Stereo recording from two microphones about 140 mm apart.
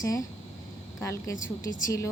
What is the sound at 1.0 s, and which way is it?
A woman's voice, 20° left (ahead or behind).